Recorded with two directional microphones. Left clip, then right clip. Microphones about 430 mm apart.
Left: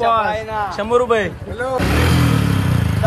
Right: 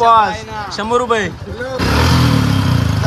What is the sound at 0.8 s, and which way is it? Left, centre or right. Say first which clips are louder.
Speech: right 1 dB; centre.